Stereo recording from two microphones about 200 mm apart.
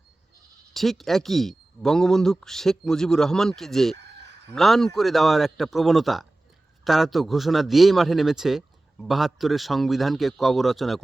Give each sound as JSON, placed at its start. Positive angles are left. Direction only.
{"t": 0.7, "sound": "a man's voice", "side_deg": 0}
{"t": 3.9, "sound": "chicken", "side_deg": -60}
{"t": 4.5, "sound": "a man's voice", "side_deg": 0}